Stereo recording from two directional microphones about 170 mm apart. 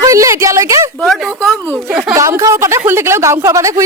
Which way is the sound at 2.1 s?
20° right (ahead or behind).